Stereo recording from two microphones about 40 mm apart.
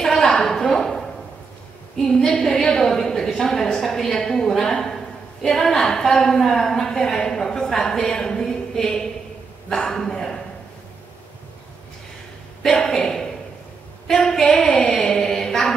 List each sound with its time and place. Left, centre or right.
0.0 s a sound: centre
2.0 s a woman's voice: centre
12.6 s a sound: centre
14.3 s a woman's voice: centre
14.6 s music: centre
14.9 s mantra: centre